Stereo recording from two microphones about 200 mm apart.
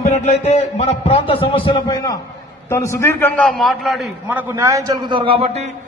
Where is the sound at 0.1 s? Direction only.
35° left (ahead or behind).